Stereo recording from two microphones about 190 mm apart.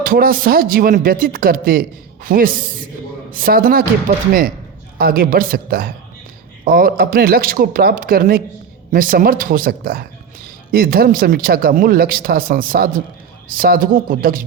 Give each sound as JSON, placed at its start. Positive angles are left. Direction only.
{"t": 0.0, "sound": "speech", "side_deg": -50}